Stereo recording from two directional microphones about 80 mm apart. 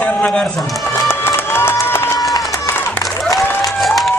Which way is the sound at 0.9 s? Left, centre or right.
Left.